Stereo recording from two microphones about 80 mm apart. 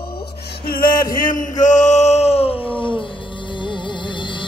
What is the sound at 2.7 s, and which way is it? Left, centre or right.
Music, left.